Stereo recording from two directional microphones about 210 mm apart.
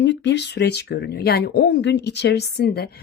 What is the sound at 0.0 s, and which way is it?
Speech, 55° left (ahead or behind).